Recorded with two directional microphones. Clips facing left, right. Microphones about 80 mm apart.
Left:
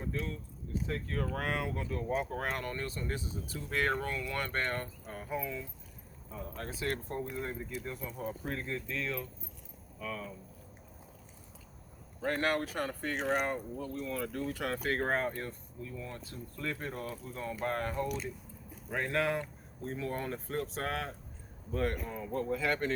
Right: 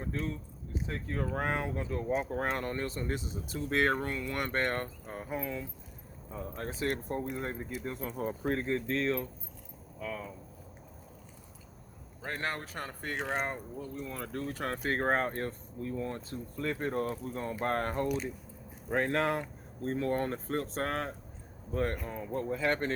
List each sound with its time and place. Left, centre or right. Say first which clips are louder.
0.0 s speech: right 2 dB; right
0.9 s speech: right 1 dB; right
3.7 s speech: right 3 dB; right
5.0 s speech: right 2 dB; right
5.3 s speech: right 1 dB; right
8.0 s speech: right 5 dB; right
10.0 s speech: right 1 dB; centre
12.2 s speech: left 5 dB; right
14.3 s speech: even; right
18.9 s speech: right 3 dB; right
19.8 s speech: right 6 dB; right